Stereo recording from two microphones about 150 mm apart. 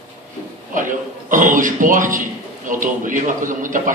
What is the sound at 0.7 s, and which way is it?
A man's voice, 60° right (ahead or behind).